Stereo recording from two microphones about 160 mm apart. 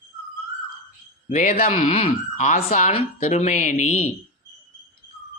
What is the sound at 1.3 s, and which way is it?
Speech, 50° left (ahead or behind).